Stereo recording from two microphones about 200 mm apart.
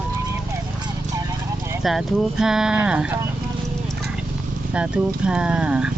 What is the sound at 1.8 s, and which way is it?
Speech, centre (ahead or behind).